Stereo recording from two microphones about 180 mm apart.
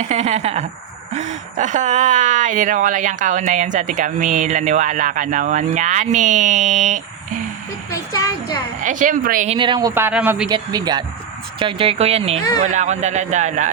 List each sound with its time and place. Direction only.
0.0 s speech: 40° right (ahead or behind)
7.9 s a sound: 20° left (ahead or behind)
8.8 s speech: 45° right (ahead or behind)
9.5 s speech: 25° right (ahead or behind)
9.9 s a man's voice: 10° right (ahead or behind)
10.5 s speech: 20° right (ahead or behind)
11.6 s speech: 30° right (ahead or behind)